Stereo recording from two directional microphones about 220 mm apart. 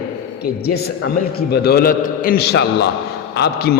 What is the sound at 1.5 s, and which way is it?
A man's voice, 45° left (ahead or behind).